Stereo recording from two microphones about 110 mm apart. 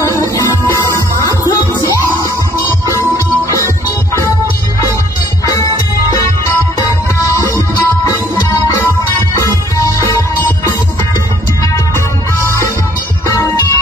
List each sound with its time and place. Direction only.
0.4 s music: 25° left (ahead or behind)
2.9 s music: 25° right (ahead or behind)
3.4 s music: 25° left (ahead or behind)
6.1 s music: 30° left (ahead or behind)
12.4 s music: 25° left (ahead or behind)